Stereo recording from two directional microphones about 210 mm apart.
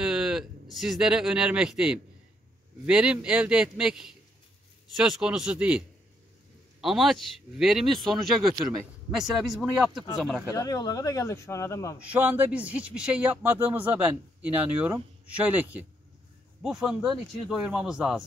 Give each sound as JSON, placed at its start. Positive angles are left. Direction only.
{"t": 0.0, "sound": "a sound", "side_deg": -5}
{"t": 0.7, "sound": "speech", "side_deg": 0}
{"t": 10.5, "sound": "speech", "side_deg": 15}
{"t": 12.0, "sound": "speech", "side_deg": -10}